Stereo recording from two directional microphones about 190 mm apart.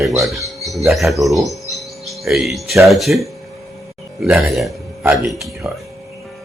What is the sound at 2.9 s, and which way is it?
Speech, centre (ahead or behind).